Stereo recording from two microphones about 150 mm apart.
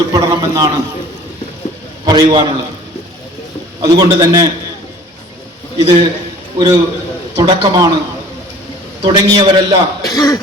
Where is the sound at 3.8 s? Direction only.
25° right (ahead or behind).